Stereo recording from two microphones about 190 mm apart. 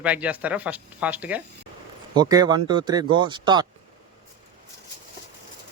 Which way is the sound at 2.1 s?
20° right (ahead or behind).